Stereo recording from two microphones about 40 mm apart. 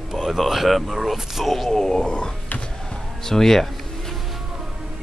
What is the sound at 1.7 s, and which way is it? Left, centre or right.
Speech, centre.